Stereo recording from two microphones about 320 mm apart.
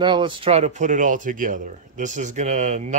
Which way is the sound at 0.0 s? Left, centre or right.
Centre.